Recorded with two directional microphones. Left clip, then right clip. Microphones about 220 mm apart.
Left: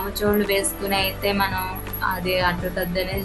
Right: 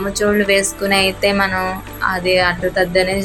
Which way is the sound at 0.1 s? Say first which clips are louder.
Right 7 dB; 15° right (ahead or behind).